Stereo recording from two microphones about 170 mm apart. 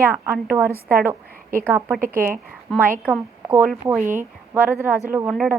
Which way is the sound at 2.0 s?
55° right (ahead or behind).